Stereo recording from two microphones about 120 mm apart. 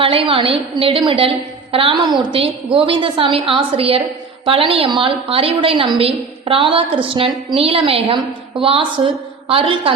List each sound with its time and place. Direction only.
0.0 s a woman's voice: 50° right (ahead or behind)